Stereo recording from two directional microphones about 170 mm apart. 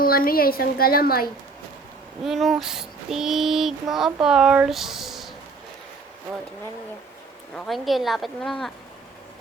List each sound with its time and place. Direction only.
0.0 s a woman's voice: 60° left (ahead or behind)
2.2 s child singing: centre (ahead or behind)
7.5 s child singing: 5° left (ahead or behind)